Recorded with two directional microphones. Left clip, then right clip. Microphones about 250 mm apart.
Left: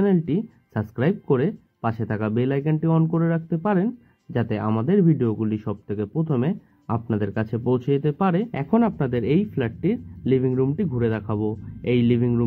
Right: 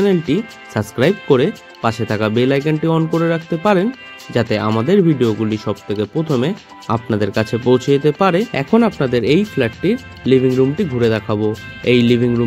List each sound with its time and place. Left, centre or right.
0.0 s speech: right